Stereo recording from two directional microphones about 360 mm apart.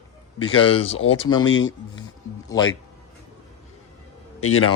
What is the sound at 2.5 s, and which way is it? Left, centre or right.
Speech, centre.